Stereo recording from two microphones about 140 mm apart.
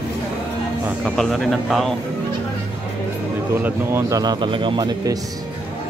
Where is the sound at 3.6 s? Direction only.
20° right (ahead or behind).